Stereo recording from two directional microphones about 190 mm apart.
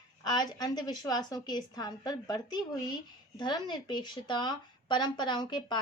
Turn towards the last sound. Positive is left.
turn(degrees=25)  # may be behind; listen again after turning